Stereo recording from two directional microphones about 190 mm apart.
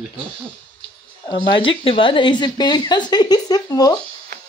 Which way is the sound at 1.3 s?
25° left (ahead or behind).